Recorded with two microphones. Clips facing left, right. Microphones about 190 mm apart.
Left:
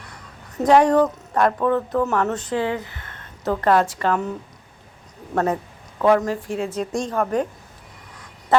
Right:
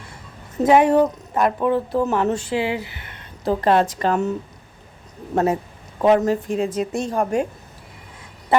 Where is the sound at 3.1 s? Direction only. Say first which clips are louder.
Right 2 dB; 15° right (ahead or behind).